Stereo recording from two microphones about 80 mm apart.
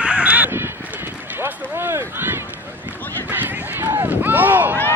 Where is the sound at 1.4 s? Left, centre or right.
Right.